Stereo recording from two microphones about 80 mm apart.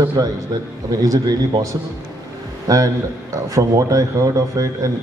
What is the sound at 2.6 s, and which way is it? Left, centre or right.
A man's voice, right.